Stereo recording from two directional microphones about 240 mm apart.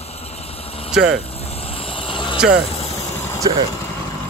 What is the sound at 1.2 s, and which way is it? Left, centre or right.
Vehicle, left.